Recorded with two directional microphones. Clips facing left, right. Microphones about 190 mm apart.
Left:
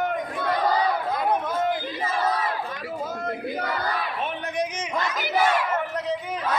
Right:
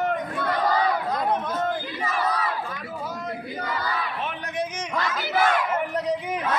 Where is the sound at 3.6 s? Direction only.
60° left (ahead or behind).